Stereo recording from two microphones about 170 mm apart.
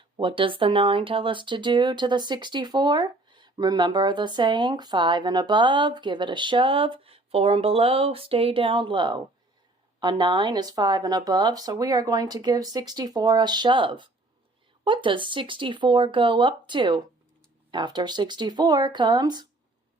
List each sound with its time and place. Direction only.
0.2 s speech: 30° right (ahead or behind)